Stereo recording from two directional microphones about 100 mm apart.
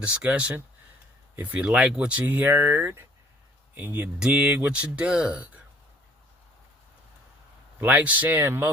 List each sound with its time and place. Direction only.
0.0 s speech: 15° right (ahead or behind)
7.8 s speech: 15° right (ahead or behind)